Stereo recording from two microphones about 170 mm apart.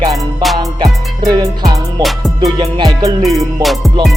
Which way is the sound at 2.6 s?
25° right (ahead or behind).